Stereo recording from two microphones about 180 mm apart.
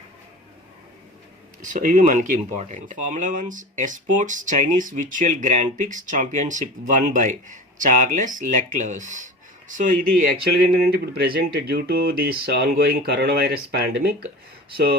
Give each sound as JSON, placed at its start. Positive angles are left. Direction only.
{"t": 1.7, "sound": "speech", "side_deg": -45}